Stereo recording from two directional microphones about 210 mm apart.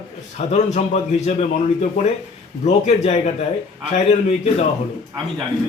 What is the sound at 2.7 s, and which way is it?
Speech, 30° left (ahead or behind).